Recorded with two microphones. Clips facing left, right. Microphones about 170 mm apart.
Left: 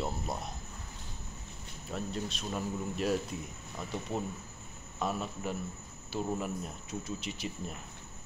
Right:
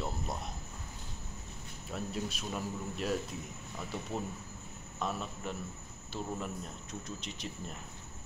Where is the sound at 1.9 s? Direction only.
5° right (ahead or behind).